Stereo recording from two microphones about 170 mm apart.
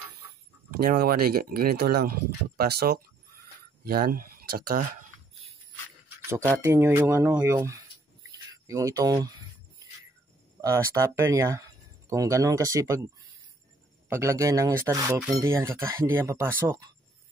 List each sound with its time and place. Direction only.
0.7 s speech: 60° right (ahead or behind)
6.0 s filing: 15° right (ahead or behind)
6.6 s speech: 15° right (ahead or behind)
8.3 s a sound: 20° right (ahead or behind)
10.6 s speech: 15° right (ahead or behind)